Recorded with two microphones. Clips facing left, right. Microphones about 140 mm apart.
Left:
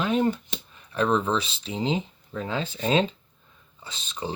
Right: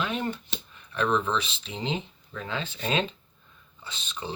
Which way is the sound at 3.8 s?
40° left (ahead or behind).